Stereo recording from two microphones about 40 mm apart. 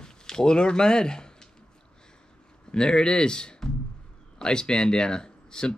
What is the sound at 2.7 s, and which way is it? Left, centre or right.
Speech, left.